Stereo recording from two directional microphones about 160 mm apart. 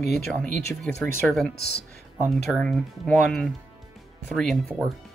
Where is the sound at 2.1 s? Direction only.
Centre (ahead or behind).